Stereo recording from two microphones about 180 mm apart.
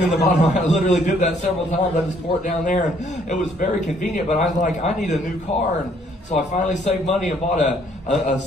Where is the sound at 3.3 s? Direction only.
40° left (ahead or behind).